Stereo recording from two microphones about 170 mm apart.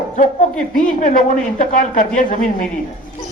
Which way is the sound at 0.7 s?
50° left (ahead or behind).